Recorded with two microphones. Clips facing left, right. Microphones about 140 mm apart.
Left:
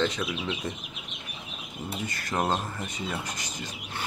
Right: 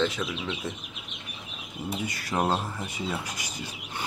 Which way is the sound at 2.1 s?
10° right (ahead or behind).